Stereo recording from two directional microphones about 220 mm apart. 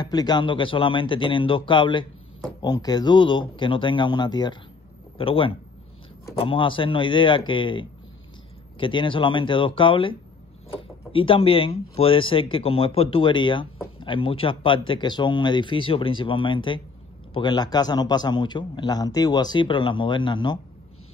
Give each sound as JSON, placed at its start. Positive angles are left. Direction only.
{"t": 0.0, "sound": "a man's voice", "side_deg": 20}